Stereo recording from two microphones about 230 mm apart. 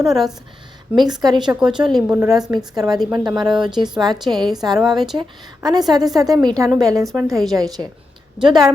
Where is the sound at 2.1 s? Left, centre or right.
Centre.